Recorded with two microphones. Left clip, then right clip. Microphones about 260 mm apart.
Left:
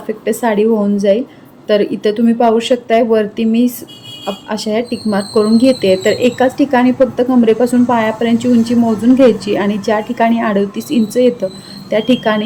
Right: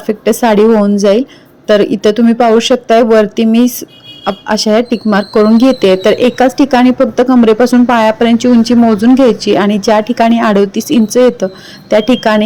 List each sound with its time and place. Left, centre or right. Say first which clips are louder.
0.1 s speech: right 6 dB; right